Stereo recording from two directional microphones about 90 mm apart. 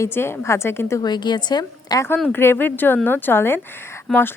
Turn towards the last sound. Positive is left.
turn(degrees=25)  # may be behind; listen again after turning